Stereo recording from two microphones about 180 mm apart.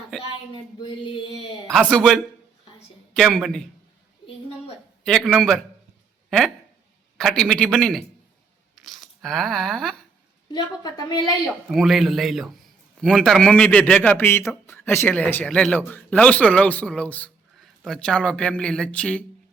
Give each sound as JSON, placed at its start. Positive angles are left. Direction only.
{"t": 1.7, "sound": "a man's voice", "side_deg": 5}
{"t": 5.0, "sound": "a man's voice", "side_deg": 0}
{"t": 7.2, "sound": "a man's voice", "side_deg": 0}
{"t": 9.0, "sound": "a sound", "side_deg": 0}
{"t": 10.5, "sound": "a woman's voice", "side_deg": 25}
{"t": 11.7, "sound": "a man's voice", "side_deg": 0}